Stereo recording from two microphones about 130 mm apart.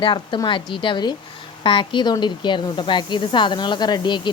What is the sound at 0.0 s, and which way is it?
Speech, 40° left (ahead or behind).